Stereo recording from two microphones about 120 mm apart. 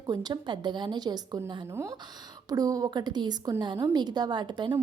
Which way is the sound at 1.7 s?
25° right (ahead or behind).